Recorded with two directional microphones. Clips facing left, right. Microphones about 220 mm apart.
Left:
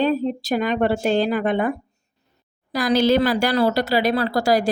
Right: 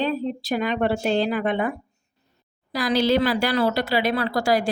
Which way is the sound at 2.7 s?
45° left (ahead or behind).